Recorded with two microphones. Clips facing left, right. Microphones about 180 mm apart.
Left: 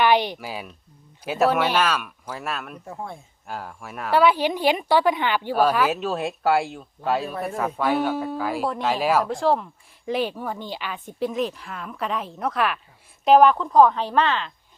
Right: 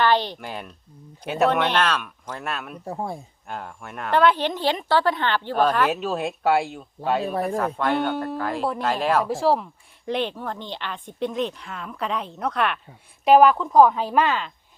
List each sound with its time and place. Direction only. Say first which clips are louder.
0.0 s speech: left 1 dB; 15° left (ahead or behind)
0.3 s speech: left 1 dB; 5° left (ahead or behind)
2.8 s speech: right 5 dB; 35° right (ahead or behind)
3.4 s speech: left 4 dB; centre (ahead or behind)